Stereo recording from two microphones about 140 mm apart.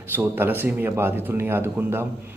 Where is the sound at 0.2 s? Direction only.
15° right (ahead or behind).